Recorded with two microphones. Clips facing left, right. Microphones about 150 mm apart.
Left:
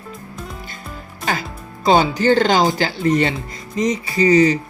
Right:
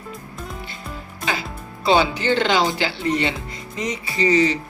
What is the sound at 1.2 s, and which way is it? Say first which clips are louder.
Speech: left 3 dB; 45° left (ahead or behind).